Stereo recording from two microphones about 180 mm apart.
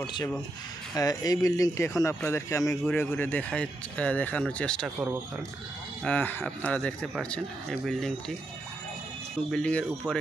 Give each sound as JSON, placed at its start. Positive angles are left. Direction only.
{"t": 0.0, "sound": "speech", "side_deg": 25}
{"t": 2.8, "sound": "speech", "side_deg": 5}
{"t": 6.0, "sound": "speech", "side_deg": 10}
{"t": 9.5, "sound": "speech", "side_deg": 5}